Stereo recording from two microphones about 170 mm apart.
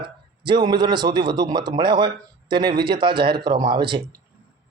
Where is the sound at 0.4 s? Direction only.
25° right (ahead or behind).